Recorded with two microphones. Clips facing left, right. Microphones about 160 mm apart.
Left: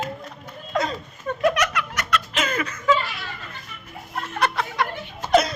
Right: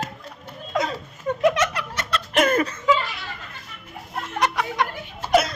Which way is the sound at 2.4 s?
55° right (ahead or behind).